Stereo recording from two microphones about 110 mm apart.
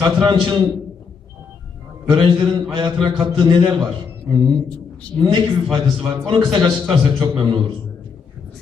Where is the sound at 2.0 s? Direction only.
45° right (ahead or behind).